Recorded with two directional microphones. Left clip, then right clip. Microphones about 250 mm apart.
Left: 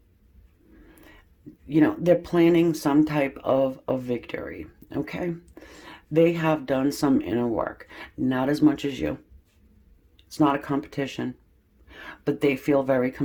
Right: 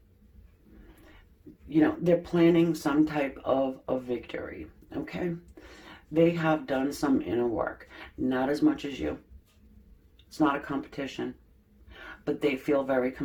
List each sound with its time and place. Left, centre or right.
1.7 s speech: left
5.6 s a sound: left
6.1 s speech: left
10.2 s speech: left